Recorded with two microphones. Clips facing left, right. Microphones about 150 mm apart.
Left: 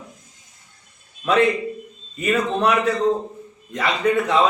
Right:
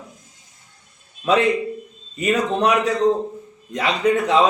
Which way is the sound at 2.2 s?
15° right (ahead or behind).